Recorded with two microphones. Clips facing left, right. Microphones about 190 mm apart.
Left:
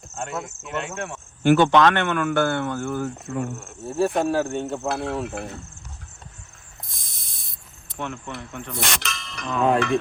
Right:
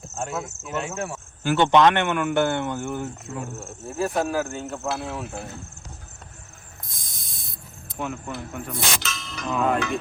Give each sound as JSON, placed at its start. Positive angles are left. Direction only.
{"t": 0.2, "sound": "speech", "side_deg": -5}
{"t": 1.5, "sound": "speech", "side_deg": -20}
{"t": 3.6, "sound": "speech", "side_deg": 0}
{"t": 6.8, "sound": "mechanisms", "side_deg": 0}
{"t": 7.9, "sound": "speech", "side_deg": -5}